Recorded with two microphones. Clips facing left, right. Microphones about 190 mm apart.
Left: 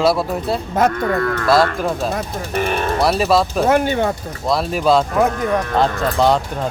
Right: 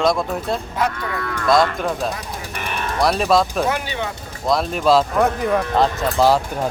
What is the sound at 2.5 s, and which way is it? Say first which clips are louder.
Speech: left 6 dB; 35° left (ahead or behind).